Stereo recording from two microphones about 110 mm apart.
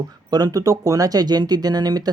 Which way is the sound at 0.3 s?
35° right (ahead or behind).